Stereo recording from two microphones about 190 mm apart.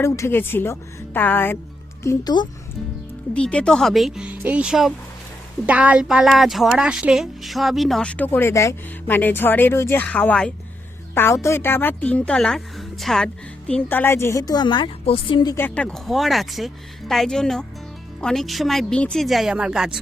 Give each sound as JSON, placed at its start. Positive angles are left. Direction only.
{"t": 0.0, "sound": "speech", "side_deg": 15}
{"t": 2.0, "sound": "speech", "side_deg": 20}
{"t": 3.3, "sound": "a woman's voice", "side_deg": 5}
{"t": 15.5, "sound": "speech", "side_deg": 10}